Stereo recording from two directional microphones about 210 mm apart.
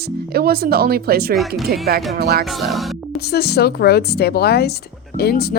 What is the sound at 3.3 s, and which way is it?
Speech, 50° left (ahead or behind).